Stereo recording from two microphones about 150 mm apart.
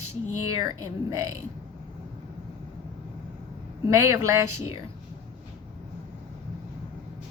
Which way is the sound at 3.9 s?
20° right (ahead or behind).